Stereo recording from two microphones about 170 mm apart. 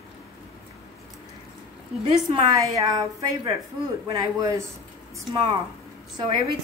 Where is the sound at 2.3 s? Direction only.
20° right (ahead or behind).